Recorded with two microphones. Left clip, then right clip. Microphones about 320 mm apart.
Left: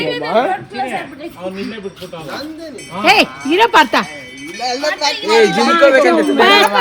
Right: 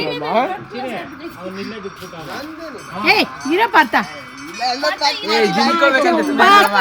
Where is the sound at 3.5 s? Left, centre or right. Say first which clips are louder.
Left 3 dB; centre.